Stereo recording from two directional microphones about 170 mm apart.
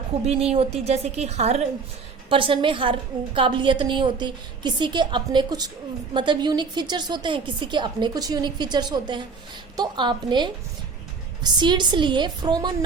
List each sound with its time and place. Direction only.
0.3 s a woman's voice: 35° right (ahead or behind)